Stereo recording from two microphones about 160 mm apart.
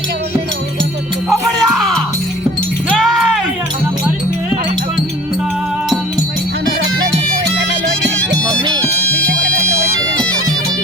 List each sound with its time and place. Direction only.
1.3 s music: centre (ahead or behind)
8.6 s music: 30° right (ahead or behind)